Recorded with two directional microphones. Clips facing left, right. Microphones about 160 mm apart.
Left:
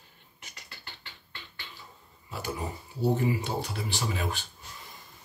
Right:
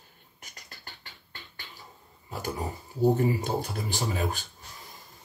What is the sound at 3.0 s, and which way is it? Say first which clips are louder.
Speech: right 3 dB; 45° right (ahead or behind).